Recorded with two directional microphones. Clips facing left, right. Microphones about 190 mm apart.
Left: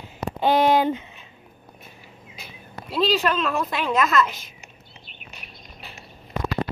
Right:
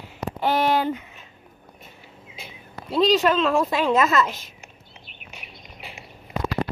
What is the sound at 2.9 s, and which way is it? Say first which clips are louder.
Speech: right 3 dB; 25° right (ahead or behind).